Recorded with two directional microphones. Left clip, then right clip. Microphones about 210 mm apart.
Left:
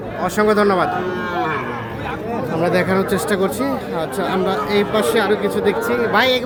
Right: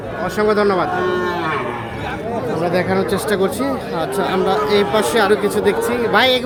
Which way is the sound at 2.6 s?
5° left (ahead or behind).